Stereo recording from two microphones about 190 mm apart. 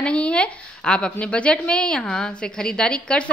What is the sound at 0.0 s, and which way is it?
A woman's voice, 5° left (ahead or behind).